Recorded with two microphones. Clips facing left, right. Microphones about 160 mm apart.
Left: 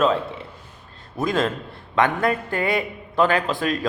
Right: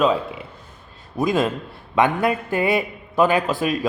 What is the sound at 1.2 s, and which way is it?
Speech, 20° right (ahead or behind).